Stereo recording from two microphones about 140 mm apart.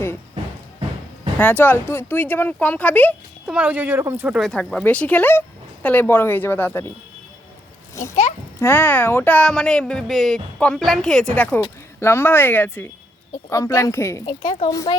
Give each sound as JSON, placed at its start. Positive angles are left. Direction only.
{"t": 1.4, "sound": "speech", "side_deg": 10}
{"t": 3.4, "sound": "speech", "side_deg": -10}
{"t": 4.4, "sound": "speech", "side_deg": 5}
{"t": 8.5, "sound": "a woman's voice", "side_deg": 15}
{"t": 14.3, "sound": "a woman's voice", "side_deg": 35}